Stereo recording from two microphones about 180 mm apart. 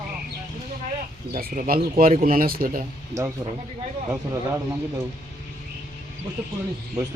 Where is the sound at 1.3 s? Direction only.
55° right (ahead or behind).